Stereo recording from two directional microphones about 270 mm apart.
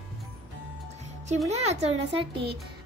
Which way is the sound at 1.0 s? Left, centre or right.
Right.